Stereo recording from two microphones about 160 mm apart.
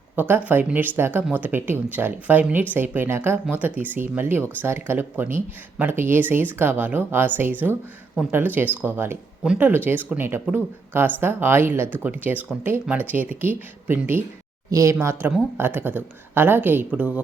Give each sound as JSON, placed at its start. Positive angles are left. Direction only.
{"t": 0.2, "sound": "speech", "side_deg": -10}